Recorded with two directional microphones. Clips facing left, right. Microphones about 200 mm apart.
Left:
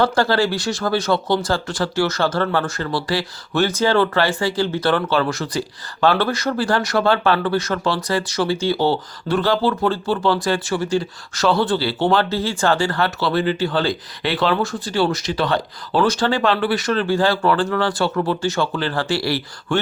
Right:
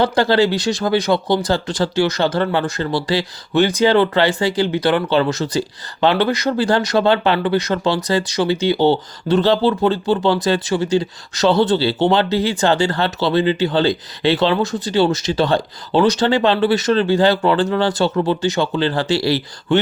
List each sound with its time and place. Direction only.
0.0 s speech: 20° right (ahead or behind)